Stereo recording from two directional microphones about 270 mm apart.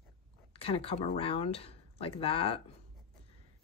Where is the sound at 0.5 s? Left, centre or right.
Left.